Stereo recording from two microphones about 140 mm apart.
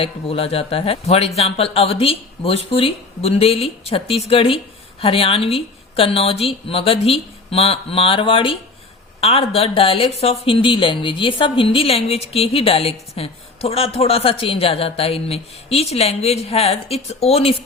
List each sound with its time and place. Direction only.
0.0 s speech: 45° left (ahead or behind)